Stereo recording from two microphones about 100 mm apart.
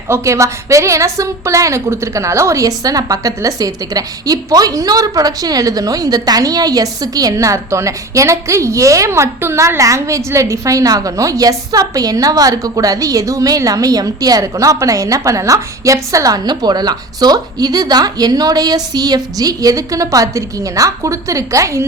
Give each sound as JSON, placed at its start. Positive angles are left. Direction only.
{"t": 0.1, "sound": "a woman's voice", "side_deg": -30}